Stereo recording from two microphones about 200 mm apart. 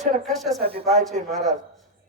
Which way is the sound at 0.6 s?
30° right (ahead or behind).